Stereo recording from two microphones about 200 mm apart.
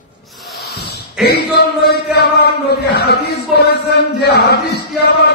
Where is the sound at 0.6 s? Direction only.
55° left (ahead or behind).